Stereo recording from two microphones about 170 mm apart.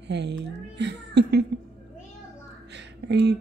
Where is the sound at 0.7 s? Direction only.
85° right.